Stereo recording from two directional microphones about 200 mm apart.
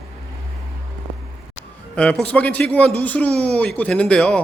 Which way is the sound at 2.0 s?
5° left (ahead or behind).